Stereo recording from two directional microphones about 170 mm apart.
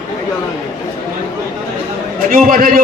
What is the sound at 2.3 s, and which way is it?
Speech, 55° right (ahead or behind).